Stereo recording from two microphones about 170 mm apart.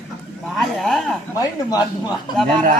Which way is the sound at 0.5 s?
Centre (ahead or behind).